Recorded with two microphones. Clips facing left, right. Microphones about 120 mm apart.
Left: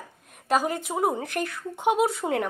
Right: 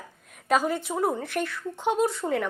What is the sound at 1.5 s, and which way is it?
Speech, 55° left (ahead or behind).